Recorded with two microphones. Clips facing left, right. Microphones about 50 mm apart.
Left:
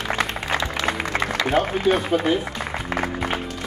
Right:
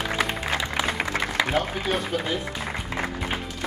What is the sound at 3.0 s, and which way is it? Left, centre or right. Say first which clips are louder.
Music: left 2 dB; left.